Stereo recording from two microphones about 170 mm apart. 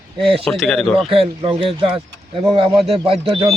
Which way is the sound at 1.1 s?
35° right (ahead or behind).